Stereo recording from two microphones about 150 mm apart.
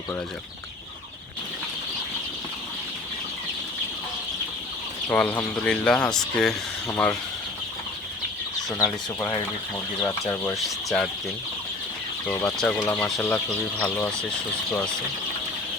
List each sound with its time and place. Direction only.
5.0 s speech: 10° left (ahead or behind)
8.8 s speech: 15° left (ahead or behind)
12.4 s speech: 5° left (ahead or behind)